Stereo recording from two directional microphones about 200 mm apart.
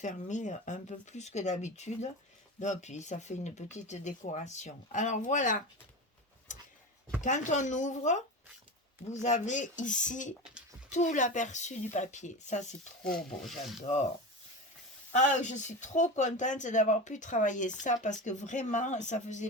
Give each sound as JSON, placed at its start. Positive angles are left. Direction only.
{"t": 0.0, "sound": "speech", "side_deg": 35}
{"t": 6.5, "sound": "a sound", "side_deg": 40}
{"t": 7.2, "sound": "speech", "side_deg": 40}
{"t": 9.2, "sound": "speech", "side_deg": 35}
{"t": 13.1, "sound": "speech", "side_deg": 0}
{"t": 15.1, "sound": "speech", "side_deg": 35}